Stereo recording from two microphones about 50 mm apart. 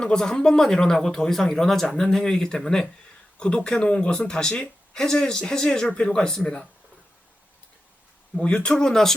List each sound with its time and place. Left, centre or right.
0.0 s speech: centre
3.3 s speech: centre
8.4 s speech: left